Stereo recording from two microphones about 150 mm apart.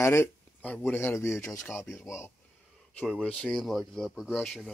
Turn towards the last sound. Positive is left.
turn(degrees=0)  # may be behind; listen again after turning